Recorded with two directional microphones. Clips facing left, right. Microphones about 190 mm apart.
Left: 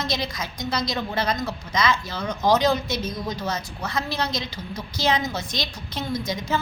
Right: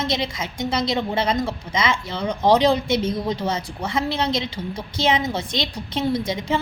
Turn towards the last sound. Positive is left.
turn(degrees=-30)  # may be behind; listen again after turning